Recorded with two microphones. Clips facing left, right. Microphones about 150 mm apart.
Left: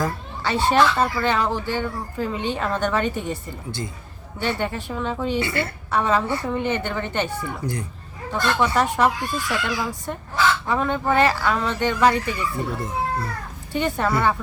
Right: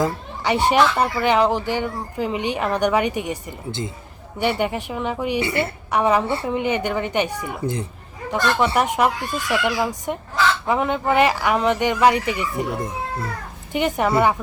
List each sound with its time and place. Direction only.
0.0 s speech: 20° right (ahead or behind)
6.5 s speech: 15° right (ahead or behind)